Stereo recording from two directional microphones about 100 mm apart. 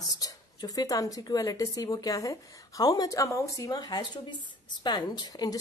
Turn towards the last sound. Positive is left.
turn(degrees=40)  # may be behind; listen again after turning